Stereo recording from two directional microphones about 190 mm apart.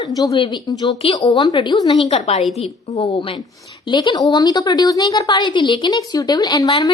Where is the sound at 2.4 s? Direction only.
Centre (ahead or behind).